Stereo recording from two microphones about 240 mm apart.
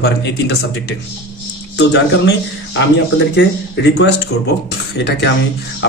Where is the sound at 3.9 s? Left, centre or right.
Left.